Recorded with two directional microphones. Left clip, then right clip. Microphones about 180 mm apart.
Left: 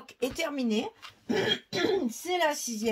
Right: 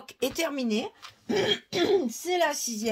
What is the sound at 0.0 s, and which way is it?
Speech, 45° right (ahead or behind).